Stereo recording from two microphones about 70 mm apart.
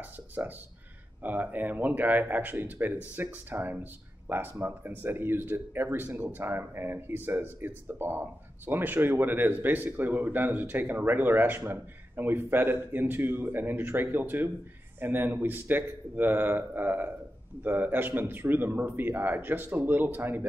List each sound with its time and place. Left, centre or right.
0.4 s speech: right